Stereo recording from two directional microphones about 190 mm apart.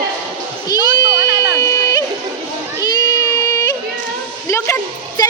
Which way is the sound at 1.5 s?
15° left (ahead or behind).